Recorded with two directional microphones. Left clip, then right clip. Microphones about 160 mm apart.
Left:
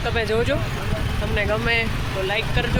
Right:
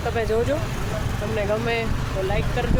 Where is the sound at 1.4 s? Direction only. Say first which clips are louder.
Left 3 dB; 10° left (ahead or behind).